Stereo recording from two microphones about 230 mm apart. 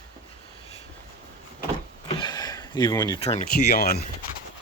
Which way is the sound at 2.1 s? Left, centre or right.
Centre.